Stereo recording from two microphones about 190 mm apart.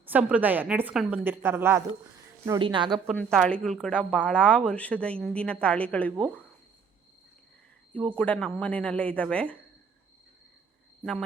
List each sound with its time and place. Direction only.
0.0 s a woman's voice: 10° right (ahead or behind)
2.6 s a woman's voice: 25° right (ahead or behind)
3.2 s speech: 5° left (ahead or behind)
8.1 s speech: 5° left (ahead or behind)